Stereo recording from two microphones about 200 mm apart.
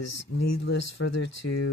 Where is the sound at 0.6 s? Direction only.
60° left (ahead or behind).